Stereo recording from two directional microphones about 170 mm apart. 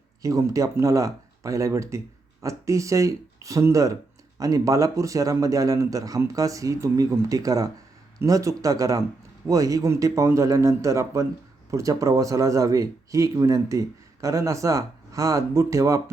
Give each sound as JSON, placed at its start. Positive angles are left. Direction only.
{"t": 0.2, "sound": "speech", "side_deg": -20}